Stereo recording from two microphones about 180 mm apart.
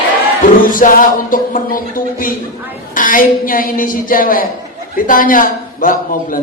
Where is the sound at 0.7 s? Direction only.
50° left (ahead or behind).